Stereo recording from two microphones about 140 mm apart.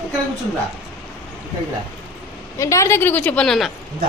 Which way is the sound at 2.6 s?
20° left (ahead or behind).